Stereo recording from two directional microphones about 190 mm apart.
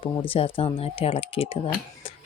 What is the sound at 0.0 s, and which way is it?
Speech, 30° left (ahead or behind).